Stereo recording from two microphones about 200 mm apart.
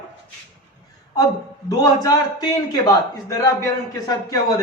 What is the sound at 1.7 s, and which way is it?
A man's voice, 20° left (ahead or behind).